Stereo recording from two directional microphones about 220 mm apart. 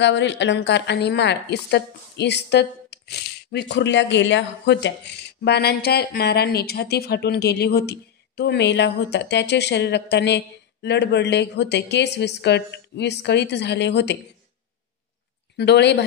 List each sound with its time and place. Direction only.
0.0 s speech: 55° left (ahead or behind)
15.5 s speech: 50° left (ahead or behind)